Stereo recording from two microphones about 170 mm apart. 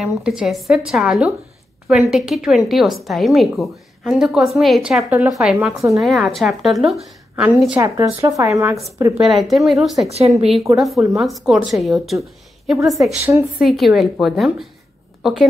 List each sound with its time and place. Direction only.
0.0 s a woman's voice: centre (ahead or behind)
7.8 s speech: 20° right (ahead or behind)
9.1 s a woman's voice: centre (ahead or behind)
10.0 s speech: 40° right (ahead or behind)
10.4 s a woman's voice: centre (ahead or behind)